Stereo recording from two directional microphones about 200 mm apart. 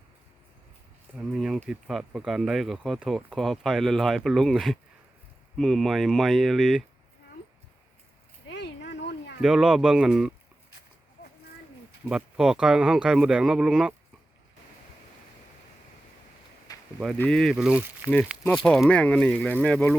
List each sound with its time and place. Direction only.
1.2 s speech: 5° right (ahead or behind)
8.4 s a sound: 60° left (ahead or behind)
9.4 s speech: centre (ahead or behind)
12.0 s speech: 5° right (ahead or behind)
16.7 s a sound: 20° left (ahead or behind)
17.2 s speech: 5° left (ahead or behind)